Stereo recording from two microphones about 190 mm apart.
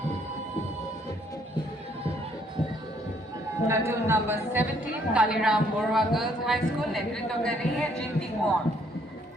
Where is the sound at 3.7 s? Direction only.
15° right (ahead or behind); by 8.0 s centre (ahead or behind).